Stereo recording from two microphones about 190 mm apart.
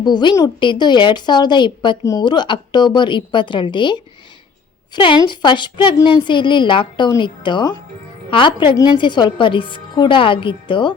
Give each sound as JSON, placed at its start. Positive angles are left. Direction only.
{"t": 0.0, "sound": "a woman's voice", "side_deg": 25}